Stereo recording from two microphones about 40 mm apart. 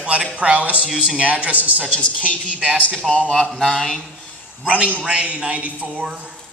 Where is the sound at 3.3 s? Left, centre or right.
Centre.